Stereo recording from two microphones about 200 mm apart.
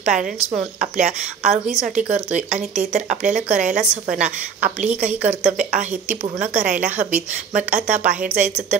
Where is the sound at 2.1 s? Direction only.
35° right (ahead or behind).